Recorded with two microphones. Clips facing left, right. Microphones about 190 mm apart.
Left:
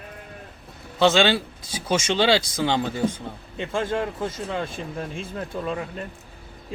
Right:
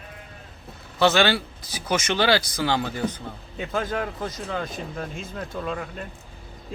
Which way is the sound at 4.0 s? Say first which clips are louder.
Left 2 dB; 5° left (ahead or behind).